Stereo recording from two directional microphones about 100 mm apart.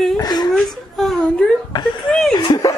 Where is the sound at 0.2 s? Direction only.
45° left (ahead or behind).